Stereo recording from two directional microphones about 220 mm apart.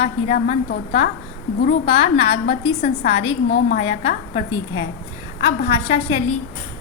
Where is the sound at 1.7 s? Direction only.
30° left (ahead or behind).